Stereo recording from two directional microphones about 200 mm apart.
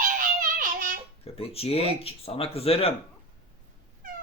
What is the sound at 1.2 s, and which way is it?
Speech, 30° left (ahead or behind).